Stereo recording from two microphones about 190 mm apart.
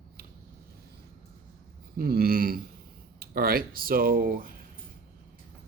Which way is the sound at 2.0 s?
50° right (ahead or behind).